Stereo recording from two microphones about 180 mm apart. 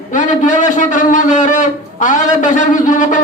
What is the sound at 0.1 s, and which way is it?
A man's voice, 45° left (ahead or behind).